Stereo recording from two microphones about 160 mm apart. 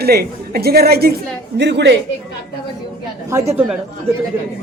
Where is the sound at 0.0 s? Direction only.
75° right (ahead or behind).